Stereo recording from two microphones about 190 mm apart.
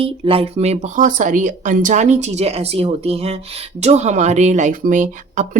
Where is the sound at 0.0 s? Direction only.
30° right (ahead or behind).